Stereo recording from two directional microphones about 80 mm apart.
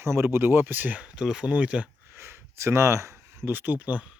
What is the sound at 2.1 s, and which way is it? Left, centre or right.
Speech, right.